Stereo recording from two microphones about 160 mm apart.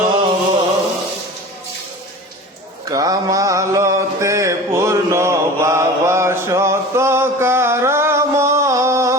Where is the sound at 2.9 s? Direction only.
25° right (ahead or behind).